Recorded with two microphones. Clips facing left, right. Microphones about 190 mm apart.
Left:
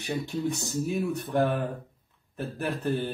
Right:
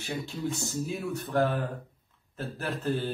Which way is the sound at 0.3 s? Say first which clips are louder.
Left 3 dB; 15° left (ahead or behind).